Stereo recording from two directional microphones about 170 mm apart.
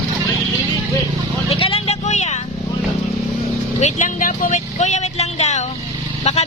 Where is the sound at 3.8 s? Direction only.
50° left (ahead or behind).